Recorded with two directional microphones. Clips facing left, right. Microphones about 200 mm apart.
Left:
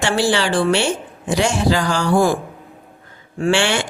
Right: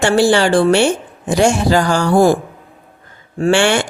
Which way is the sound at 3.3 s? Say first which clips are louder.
Right 4 dB; 45° right (ahead or behind).